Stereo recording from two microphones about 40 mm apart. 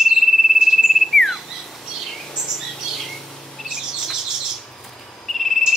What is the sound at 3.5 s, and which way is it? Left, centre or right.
Chirp, centre.